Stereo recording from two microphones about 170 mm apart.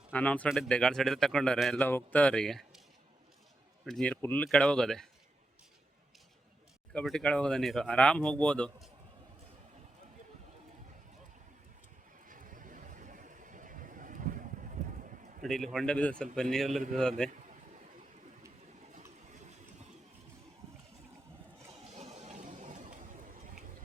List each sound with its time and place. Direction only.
0.1 s speech: 10° left (ahead or behind)
3.8 s speech: 5° left (ahead or behind)
6.9 s speech: 5° left (ahead or behind)
12.2 s vehicle: 50° right (ahead or behind)
15.4 s speech: centre (ahead or behind)
17.2 s a sound: 45° right (ahead or behind)
21.7 s a sound: 40° right (ahead or behind)